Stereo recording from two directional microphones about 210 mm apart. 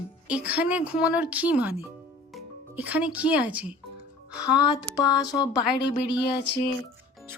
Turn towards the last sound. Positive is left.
turn(degrees=20)  # may be behind; listen again after turning